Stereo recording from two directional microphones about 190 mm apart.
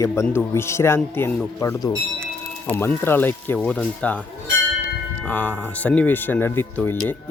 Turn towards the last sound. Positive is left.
turn(degrees=10)  # may be behind; listen again after turning